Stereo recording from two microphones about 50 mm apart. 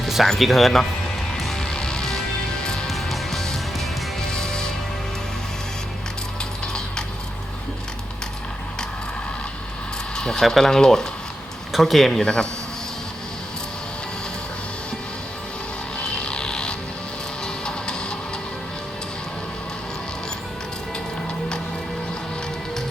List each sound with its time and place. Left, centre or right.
0.0 s speech: centre
1.3 s music: centre
2.8 s music: centre
10.2 s a sound: centre
10.4 s speech: centre
11.7 s speech: centre
12.2 s speech: centre
16.0 s a sound: centre
17.4 s music: centre